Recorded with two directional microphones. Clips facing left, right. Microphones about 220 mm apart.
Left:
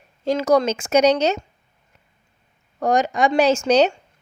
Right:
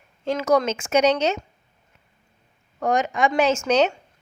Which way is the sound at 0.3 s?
35° left (ahead or behind).